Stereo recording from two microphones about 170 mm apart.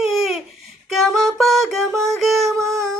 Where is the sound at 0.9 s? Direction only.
Centre (ahead or behind).